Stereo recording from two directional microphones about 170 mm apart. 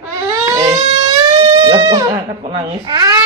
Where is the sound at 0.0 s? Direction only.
20° right (ahead or behind).